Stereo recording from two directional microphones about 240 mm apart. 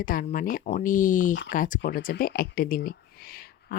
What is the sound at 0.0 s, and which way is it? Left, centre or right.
Speech, left.